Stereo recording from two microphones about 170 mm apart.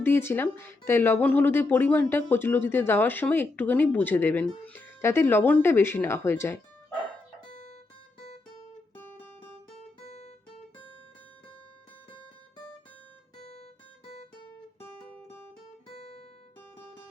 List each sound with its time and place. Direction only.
0.0 s speech: 15° left (ahead or behind)
10.0 s guitar: 40° left (ahead or behind)
13.3 s guitar: 40° left (ahead or behind)
15.9 s guitar: 35° left (ahead or behind)